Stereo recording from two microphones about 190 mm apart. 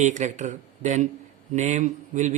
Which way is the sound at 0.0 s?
40° right (ahead or behind).